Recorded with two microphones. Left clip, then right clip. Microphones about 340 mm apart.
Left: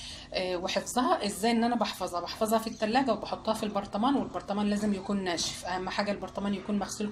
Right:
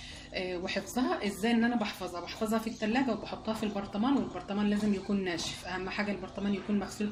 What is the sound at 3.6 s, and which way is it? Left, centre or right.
Speech, left.